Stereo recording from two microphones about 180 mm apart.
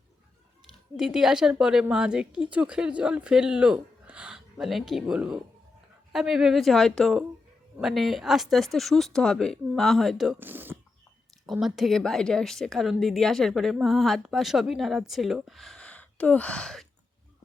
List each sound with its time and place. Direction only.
0.7 s a woman's voice: centre (ahead or behind)